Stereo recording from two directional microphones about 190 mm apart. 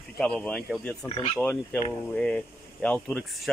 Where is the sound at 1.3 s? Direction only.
5° left (ahead or behind).